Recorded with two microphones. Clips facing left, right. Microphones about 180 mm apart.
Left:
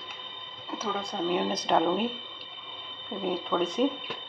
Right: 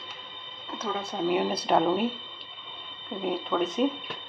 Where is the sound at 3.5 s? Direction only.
Centre (ahead or behind).